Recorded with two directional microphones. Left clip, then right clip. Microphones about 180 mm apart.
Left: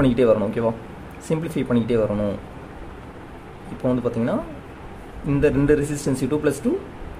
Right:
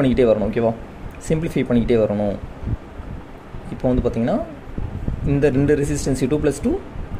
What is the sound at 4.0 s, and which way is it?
Speech, 15° right (ahead or behind).